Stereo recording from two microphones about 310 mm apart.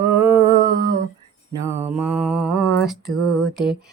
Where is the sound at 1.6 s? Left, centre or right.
Centre.